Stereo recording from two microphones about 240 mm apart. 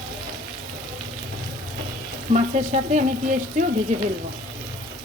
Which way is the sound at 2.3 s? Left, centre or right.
Right.